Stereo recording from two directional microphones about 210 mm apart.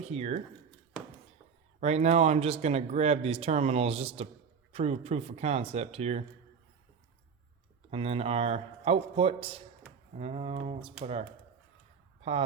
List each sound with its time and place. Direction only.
0.0 s speech: 30° right (ahead or behind)
1.8 s speech: 30° right (ahead or behind)
7.9 s a man's voice: 30° right (ahead or behind)